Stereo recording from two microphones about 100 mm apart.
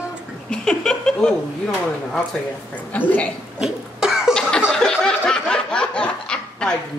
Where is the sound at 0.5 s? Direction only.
10° left (ahead or behind).